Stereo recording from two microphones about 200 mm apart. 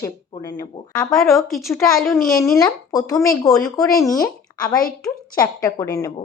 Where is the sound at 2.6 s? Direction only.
20° left (ahead or behind).